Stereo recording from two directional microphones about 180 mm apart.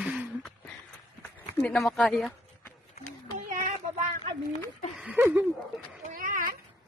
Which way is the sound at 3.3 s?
45° right (ahead or behind).